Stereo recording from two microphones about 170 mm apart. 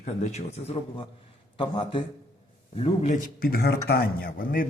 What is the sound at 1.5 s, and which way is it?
A man's voice, 30° left (ahead or behind).